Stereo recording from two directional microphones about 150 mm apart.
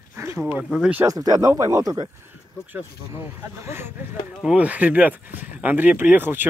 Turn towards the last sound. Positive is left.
turn(degrees=-15)  # may be behind; listen again after turning